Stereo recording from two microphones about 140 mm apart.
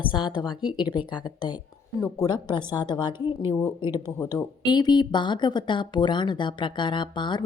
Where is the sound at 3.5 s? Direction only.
10° left (ahead or behind).